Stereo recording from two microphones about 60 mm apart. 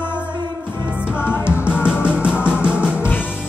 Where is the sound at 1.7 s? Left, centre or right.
Centre.